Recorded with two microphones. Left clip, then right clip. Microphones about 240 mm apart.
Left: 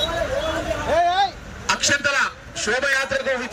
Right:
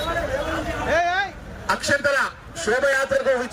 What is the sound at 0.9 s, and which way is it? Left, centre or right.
Vehicle, centre.